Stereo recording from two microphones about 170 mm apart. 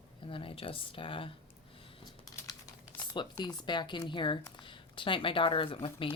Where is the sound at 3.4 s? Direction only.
25° left (ahead or behind).